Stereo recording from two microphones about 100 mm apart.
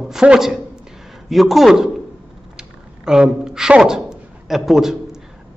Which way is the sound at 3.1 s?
5° right (ahead or behind).